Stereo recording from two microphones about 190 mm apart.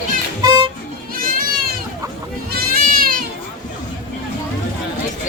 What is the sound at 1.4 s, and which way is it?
Goat, 50° right (ahead or behind).